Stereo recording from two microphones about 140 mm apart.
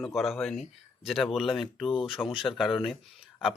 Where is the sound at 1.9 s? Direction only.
40° left (ahead or behind).